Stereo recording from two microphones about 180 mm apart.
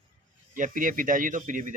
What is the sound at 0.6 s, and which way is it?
Speech, 50° right (ahead or behind).